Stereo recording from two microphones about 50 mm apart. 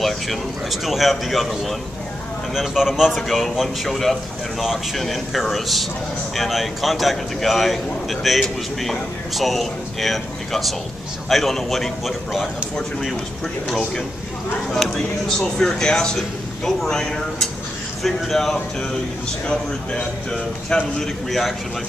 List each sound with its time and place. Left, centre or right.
0.0 s a man's voice: centre
3.2 s a man's voice: centre
14.7 s a man's voice: centre
19.4 s speech: centre
21.0 s a man's voice: centre